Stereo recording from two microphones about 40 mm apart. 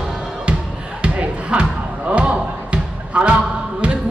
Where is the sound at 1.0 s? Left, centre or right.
Right.